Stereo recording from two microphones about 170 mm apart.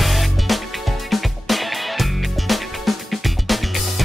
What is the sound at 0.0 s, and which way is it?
Music, centre (ahead or behind).